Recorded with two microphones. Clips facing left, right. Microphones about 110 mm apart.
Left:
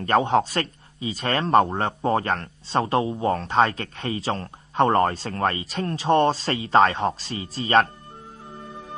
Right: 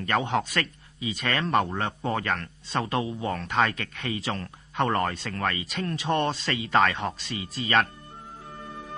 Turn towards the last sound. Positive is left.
turn(degrees=35)  # may be behind; listen again after turning